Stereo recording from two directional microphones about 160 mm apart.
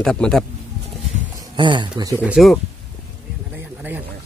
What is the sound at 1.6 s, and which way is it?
Speech, 30° right (ahead or behind).